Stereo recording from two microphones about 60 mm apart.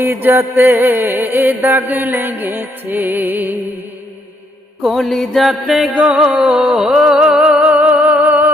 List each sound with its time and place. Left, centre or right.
0.0 s music: right
4.9 s music: centre; by 8.4 s right